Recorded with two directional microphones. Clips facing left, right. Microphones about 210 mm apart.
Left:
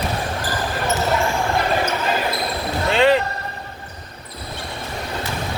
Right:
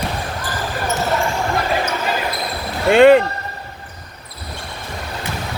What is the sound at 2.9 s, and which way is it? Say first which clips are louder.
Music: right 7 dB; 55° right (ahead or behind).